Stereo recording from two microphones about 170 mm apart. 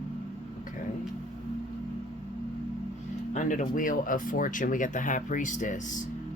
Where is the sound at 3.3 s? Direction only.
50° left (ahead or behind).